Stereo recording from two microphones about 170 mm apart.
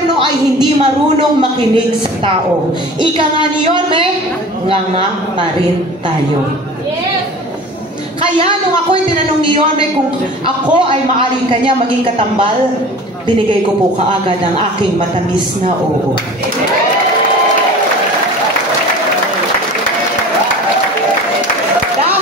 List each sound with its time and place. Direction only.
3.0 s speech: 30° right (ahead or behind)
10.4 s a man's voice: 30° right (ahead or behind)